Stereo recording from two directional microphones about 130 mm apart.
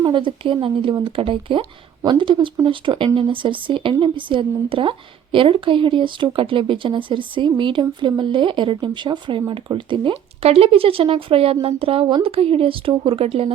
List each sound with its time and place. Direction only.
0.0 s a woman's voice: 40° right (ahead or behind)